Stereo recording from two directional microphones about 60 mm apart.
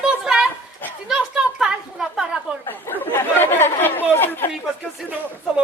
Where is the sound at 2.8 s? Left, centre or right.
Left.